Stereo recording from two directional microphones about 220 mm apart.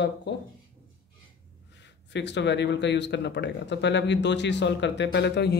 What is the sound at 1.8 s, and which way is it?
Speech, 55° left (ahead or behind).